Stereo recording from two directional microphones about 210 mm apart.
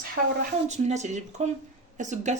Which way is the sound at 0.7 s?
35° right (ahead or behind).